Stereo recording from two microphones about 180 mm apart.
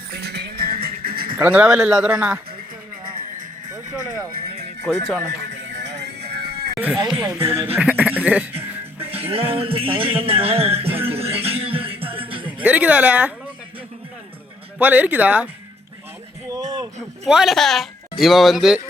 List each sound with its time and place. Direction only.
0.1 s music: 65° right (ahead or behind)
1.4 s speech: 5° right (ahead or behind)
3.2 s music: 45° right (ahead or behind)
4.1 s speech: 55° right (ahead or behind)
5.5 s music: 80° right; by 6.7 s 65° right (ahead or behind)
7.0 s speech: 20° right (ahead or behind)
9.0 s music: 30° right (ahead or behind)
12.6 s a woman's voice: 10° right (ahead or behind)
14.8 s a woman's voice: 10° right (ahead or behind)
16.5 s music: 20° right (ahead or behind)
17.2 s speech: centre (ahead or behind)